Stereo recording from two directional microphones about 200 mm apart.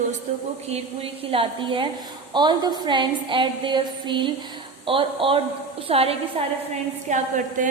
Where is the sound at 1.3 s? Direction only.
25° right (ahead or behind).